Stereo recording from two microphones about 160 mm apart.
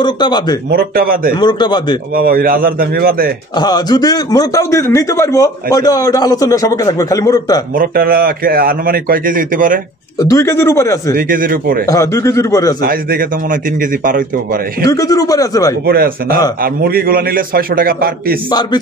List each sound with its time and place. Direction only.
0.0 s a man's voice: 25° left (ahead or behind)
0.7 s a man's voice: 65° right (ahead or behind)
1.3 s a man's voice: 30° left (ahead or behind)
2.1 s a man's voice: 65° right (ahead or behind)
3.5 s a man's voice: 25° left (ahead or behind)
7.7 s a man's voice: 65° right (ahead or behind)
10.1 s a man's voice: 20° left (ahead or behind)
11.1 s a man's voice: 60° right (ahead or behind)
11.8 s a man's voice: 20° left (ahead or behind)
12.8 s a man's voice: 65° right (ahead or behind)
14.9 s a man's voice: 20° left (ahead or behind)
15.8 s a man's voice: 75° right (ahead or behind)
18.5 s a man's voice: 25° left (ahead or behind)